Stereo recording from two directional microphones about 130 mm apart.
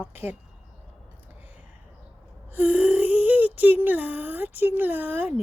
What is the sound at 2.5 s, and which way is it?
Speech, 15° right (ahead or behind).